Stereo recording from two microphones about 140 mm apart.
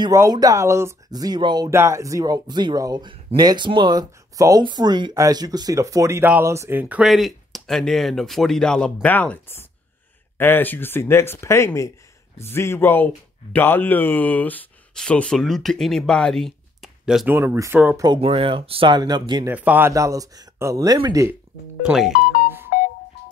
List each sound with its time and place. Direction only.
0.0 s speech: 25° right (ahead or behind)
1.7 s speech: 20° right (ahead or behind); by 17.3 s centre (ahead or behind)
17.3 s speech: 15° right (ahead or behind)
17.9 s speech: 30° right (ahead or behind)
18.2 s speech: 40° right (ahead or behind)
19.4 s speech: 10° right (ahead or behind)
19.9 s speech: 25° right (ahead or behind)
21.8 s speech: centre (ahead or behind)
22.1 s music: 65° left (ahead or behind)
22.7 s telephone dialing: 65° left (ahead or behind)